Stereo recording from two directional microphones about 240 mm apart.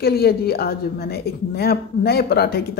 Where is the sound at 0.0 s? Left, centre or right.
Left.